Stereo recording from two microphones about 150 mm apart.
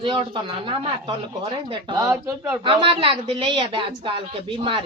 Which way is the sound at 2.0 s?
20° right (ahead or behind).